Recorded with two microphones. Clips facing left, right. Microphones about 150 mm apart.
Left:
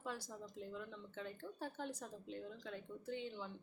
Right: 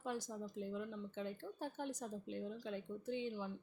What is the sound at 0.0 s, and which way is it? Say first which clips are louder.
Speech: right 4 dB; 20° right (ahead or behind).